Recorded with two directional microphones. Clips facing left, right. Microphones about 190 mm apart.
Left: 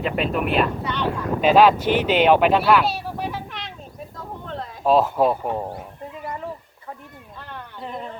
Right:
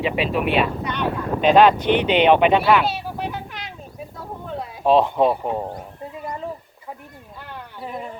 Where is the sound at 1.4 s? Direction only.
5° left (ahead or behind).